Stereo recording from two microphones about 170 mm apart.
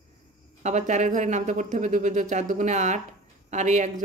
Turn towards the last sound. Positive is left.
turn(degrees=-45)  # may be behind; listen again after turning